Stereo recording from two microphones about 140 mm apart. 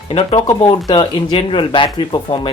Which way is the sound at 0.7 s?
30° left (ahead or behind).